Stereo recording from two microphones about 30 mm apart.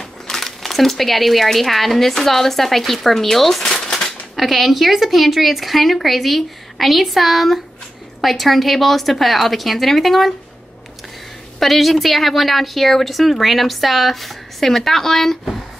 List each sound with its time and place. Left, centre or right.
0.0 s speech: centre
3.6 s shuffling cards: centre
4.4 s a woman's voice: centre
11.6 s a woman's voice: centre